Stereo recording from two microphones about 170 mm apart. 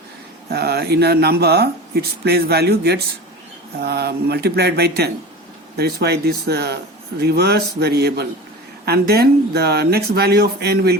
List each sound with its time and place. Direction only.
0.5 s speech: 70° right (ahead or behind)